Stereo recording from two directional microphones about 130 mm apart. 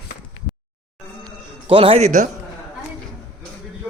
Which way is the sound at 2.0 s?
70° right (ahead or behind).